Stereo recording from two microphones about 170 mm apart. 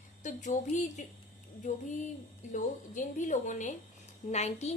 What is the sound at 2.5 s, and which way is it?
A woman's voice, 50° left (ahead or behind).